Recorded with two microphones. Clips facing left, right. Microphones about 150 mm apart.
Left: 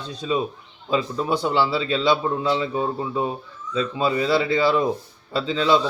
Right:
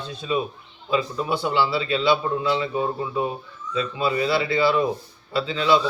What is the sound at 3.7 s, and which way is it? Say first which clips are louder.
A man's voice: left 2 dB; 35° left (ahead or behind).